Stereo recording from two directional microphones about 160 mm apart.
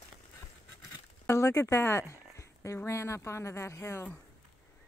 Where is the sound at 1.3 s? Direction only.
15° left (ahead or behind).